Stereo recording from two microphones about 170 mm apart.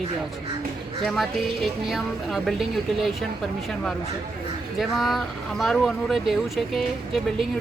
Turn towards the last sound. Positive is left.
turn(degrees=0)  # may be behind; listen again after turning